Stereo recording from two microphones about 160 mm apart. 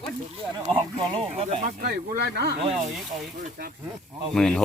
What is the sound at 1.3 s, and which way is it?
Speech, 45° right (ahead or behind).